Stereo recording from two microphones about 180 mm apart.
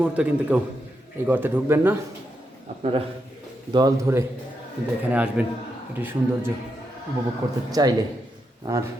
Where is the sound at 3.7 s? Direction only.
20° right (ahead or behind).